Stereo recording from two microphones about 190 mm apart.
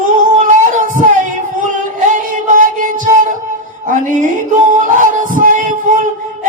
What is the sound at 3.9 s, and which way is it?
Music, 45° right (ahead or behind).